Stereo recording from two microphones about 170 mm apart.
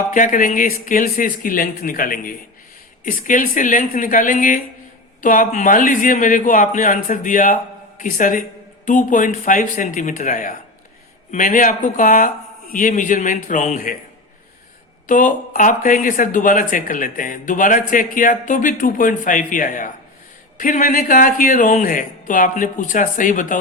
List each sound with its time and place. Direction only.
0.1 s a man's voice: 50° left (ahead or behind)
15.0 s a man's voice: 50° left (ahead or behind)